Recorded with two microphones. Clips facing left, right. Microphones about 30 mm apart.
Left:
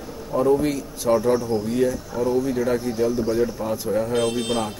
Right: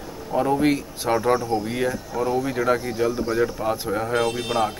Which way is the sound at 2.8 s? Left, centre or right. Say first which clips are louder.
Left 1 dB; centre.